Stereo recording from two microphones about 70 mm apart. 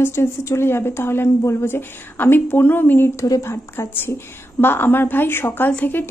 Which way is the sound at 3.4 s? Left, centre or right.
Left.